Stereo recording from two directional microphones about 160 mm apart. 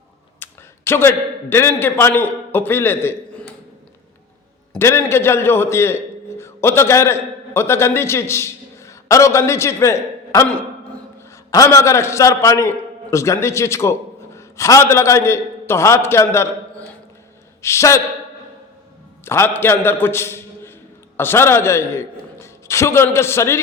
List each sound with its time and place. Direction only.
0.3 s a sound: 15° left (ahead or behind)
1.7 s a man's voice: 15° left (ahead or behind)
4.8 s a man's voice: 15° left (ahead or behind)
11.5 s a man's voice: 20° left (ahead or behind)
17.6 s a man's voice: 15° left (ahead or behind)
19.2 s a man's voice: 15° left (ahead or behind)